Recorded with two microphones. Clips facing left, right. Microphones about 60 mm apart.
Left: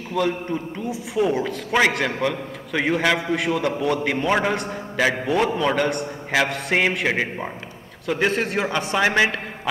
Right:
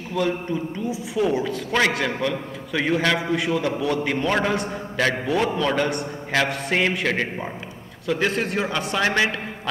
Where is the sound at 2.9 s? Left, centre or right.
Centre.